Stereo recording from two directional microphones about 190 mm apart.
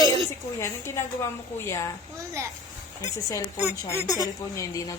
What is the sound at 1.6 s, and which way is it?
Speech, 15° left (ahead or behind).